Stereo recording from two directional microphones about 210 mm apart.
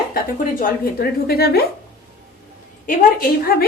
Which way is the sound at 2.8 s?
45° left (ahead or behind).